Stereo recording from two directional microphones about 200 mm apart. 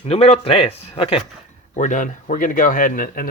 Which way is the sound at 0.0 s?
30° left (ahead or behind).